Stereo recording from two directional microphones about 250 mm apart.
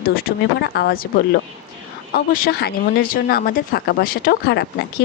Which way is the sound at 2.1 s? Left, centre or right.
Left.